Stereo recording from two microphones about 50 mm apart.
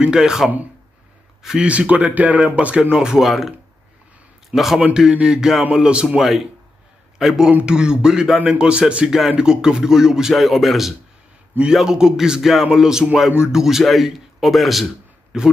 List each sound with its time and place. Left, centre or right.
0.0 s speech: centre
1.6 s speech: right
3.2 s a man's voice: centre
6.1 s a man's voice: centre
10.3 s a man's voice: centre